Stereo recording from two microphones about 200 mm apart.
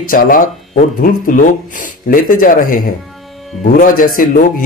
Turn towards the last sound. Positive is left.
turn(degrees=45)  # may be behind; listen again after turning